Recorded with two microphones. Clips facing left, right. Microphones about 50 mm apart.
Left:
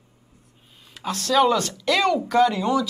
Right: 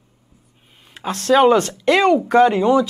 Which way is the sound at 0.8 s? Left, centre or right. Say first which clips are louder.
Right 7 dB; right.